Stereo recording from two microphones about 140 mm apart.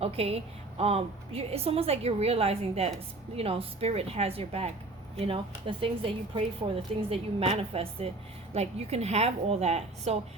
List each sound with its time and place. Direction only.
0.0 s a woman's voice: 45° right (ahead or behind)